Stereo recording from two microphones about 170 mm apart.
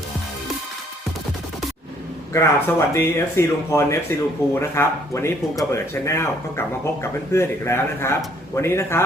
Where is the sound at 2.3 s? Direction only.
15° left (ahead or behind).